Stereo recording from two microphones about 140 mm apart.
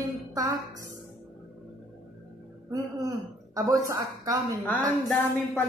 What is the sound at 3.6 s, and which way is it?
Speech, 25° right (ahead or behind).